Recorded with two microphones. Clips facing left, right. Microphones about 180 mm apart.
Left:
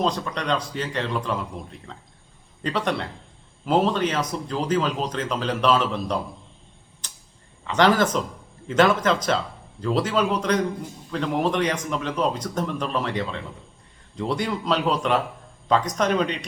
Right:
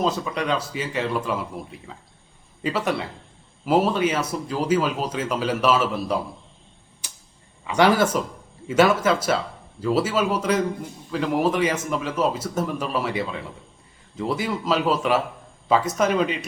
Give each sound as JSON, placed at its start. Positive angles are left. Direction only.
{"t": 0.0, "sound": "a man's voice", "side_deg": -5}
{"t": 7.0, "sound": "arrow", "side_deg": -10}
{"t": 7.7, "sound": "a man's voice", "side_deg": -10}